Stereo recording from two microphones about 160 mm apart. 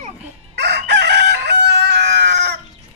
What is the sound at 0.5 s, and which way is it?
Chicken, 90° right.